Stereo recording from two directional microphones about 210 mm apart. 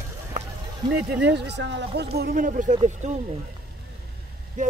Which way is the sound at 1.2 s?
55° right (ahead or behind).